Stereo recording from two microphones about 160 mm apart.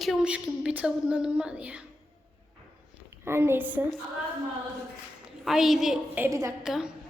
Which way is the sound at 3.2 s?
15° right (ahead or behind).